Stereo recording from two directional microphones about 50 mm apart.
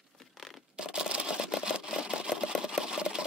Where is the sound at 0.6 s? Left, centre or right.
Centre.